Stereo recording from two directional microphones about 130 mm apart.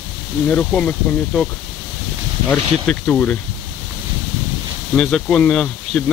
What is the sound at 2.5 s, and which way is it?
Speech, 10° left (ahead or behind).